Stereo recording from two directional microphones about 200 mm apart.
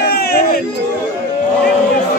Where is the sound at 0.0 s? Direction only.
50° left (ahead or behind).